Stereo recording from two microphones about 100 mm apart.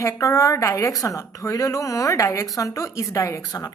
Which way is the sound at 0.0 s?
30° left (ahead or behind).